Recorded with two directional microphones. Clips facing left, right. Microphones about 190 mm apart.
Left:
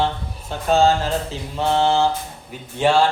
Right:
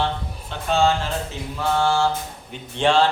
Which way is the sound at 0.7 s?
40° left (ahead or behind).